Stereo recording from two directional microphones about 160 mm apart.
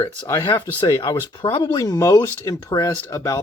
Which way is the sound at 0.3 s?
25° left (ahead or behind).